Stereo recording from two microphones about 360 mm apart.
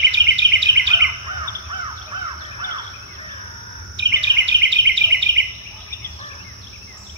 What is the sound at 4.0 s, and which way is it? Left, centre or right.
Bird vocalization, right.